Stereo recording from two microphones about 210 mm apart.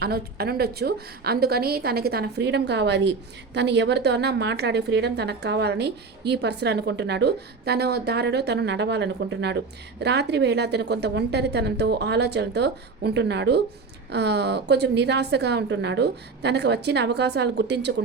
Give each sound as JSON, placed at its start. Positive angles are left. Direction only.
{"t": 0.0, "sound": "a woman's voice", "side_deg": -50}